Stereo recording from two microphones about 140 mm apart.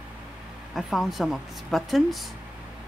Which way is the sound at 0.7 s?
Centre (ahead or behind).